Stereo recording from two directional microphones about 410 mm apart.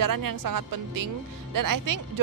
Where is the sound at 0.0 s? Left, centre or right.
Right.